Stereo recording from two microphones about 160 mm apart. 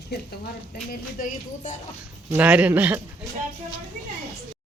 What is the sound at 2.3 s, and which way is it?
Speech, 10° right (ahead or behind).